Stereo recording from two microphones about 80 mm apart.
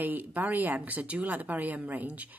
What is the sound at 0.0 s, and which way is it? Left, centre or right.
Speech, right.